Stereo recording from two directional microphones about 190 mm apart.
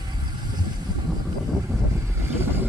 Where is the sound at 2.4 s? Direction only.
10° right (ahead or behind).